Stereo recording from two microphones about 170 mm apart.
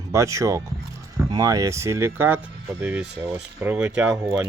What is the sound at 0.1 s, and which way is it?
Speech, 20° right (ahead or behind).